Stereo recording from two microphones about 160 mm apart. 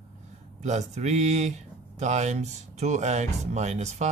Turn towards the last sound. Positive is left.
turn(degrees=-45)  # may be behind; listen again after turning